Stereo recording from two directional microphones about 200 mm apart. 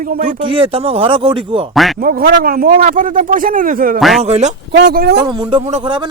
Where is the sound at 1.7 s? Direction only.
Centre (ahead or behind).